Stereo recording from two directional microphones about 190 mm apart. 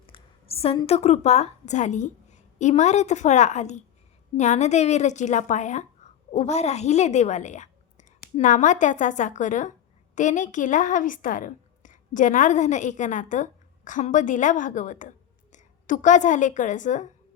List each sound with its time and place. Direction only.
0.0 s a woman's voice: 30° left (ahead or behind)